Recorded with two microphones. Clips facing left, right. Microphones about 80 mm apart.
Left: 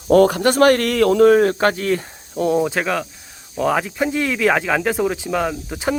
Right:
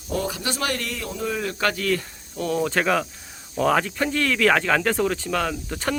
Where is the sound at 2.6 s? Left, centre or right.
Centre.